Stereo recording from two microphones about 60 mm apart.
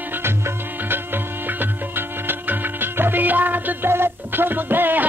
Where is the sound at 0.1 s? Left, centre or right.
Right.